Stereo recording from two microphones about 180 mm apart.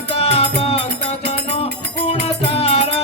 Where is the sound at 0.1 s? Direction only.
35° left (ahead or behind).